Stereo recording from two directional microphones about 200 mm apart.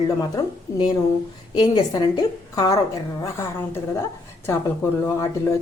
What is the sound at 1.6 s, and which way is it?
A woman's voice, 20° left (ahead or behind).